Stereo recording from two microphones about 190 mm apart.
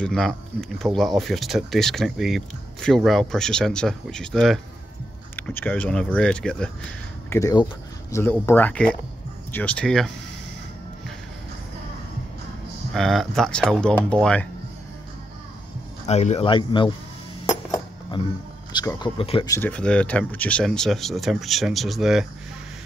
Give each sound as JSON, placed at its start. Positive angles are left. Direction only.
{"t": 0.0, "sound": "speech", "side_deg": 5}
{"t": 7.2, "sound": "speech", "side_deg": 15}
{"t": 12.9, "sound": "speech", "side_deg": 0}
{"t": 16.1, "sound": "speech", "side_deg": 35}
{"t": 17.5, "sound": "a sound", "side_deg": 20}
{"t": 18.9, "sound": "speech", "side_deg": 25}
{"t": 19.5, "sound": "speech", "side_deg": 10}